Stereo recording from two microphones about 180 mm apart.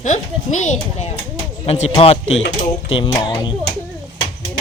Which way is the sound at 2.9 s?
30° left (ahead or behind).